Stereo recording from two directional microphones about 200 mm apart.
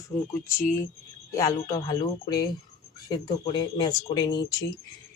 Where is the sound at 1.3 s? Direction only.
20° left (ahead or behind).